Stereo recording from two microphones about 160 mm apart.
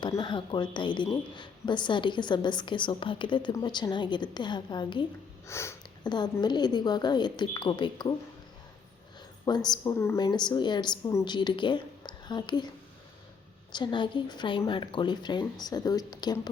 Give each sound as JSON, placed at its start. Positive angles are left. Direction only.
{"t": 0.2, "sound": "a woman's voice", "side_deg": 30}
{"t": 5.5, "sound": "a woman's voice", "side_deg": 15}
{"t": 9.6, "sound": "a woman's voice", "side_deg": 25}
{"t": 13.7, "sound": "a woman's voice", "side_deg": 30}